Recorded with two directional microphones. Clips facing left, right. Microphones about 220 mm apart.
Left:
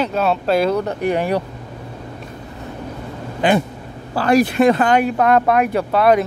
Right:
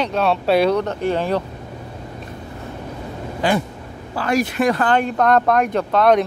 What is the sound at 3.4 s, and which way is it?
Speech, 20° left (ahead or behind).